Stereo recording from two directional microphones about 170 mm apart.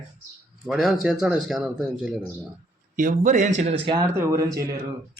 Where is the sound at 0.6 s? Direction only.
Centre (ahead or behind).